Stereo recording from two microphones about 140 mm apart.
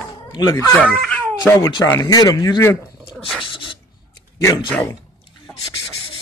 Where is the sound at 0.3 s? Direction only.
30° left (ahead or behind).